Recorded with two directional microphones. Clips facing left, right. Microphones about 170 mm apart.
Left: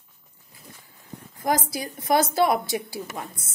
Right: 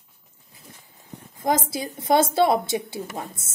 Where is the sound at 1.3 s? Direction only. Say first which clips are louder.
Right 1 dB; 25° right (ahead or behind).